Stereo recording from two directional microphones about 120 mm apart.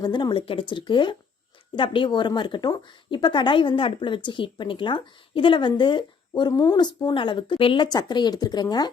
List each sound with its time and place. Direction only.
0.0 s speech: 40° left (ahead or behind)